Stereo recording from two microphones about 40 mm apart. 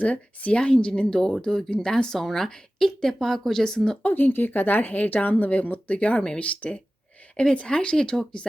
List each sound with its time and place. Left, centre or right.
0.0 s a woman's voice: left; by 3.9 s centre
4.1 s speech: left